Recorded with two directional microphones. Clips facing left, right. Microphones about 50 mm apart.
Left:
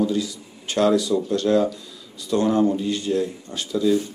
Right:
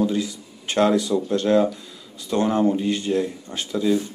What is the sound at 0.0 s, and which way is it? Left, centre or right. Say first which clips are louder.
Speech: even; right.